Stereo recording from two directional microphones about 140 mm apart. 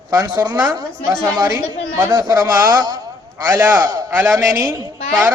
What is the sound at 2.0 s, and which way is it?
A man's voice, 30° right (ahead or behind).